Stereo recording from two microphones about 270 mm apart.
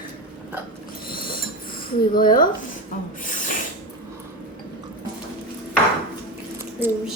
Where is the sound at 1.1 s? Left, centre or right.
Left.